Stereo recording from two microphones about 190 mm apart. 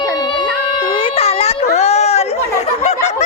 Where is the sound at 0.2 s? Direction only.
25° left (ahead or behind).